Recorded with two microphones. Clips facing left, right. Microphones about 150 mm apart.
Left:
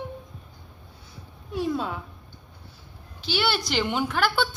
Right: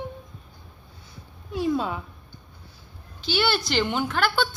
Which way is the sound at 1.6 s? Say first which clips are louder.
Right 4 dB; centre (ahead or behind).